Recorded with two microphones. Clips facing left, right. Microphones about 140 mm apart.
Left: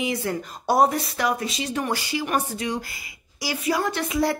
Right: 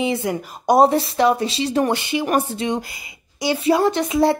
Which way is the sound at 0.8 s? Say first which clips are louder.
Right 7 dB; 25° right (ahead or behind).